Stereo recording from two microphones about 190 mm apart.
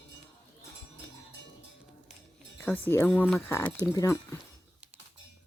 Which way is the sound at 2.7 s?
10° left (ahead or behind).